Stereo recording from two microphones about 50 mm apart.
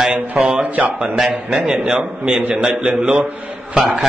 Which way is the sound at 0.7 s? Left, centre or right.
Right.